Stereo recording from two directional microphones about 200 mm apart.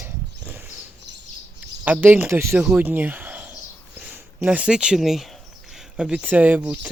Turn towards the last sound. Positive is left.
turn(degrees=-5)  # may be behind; listen again after turning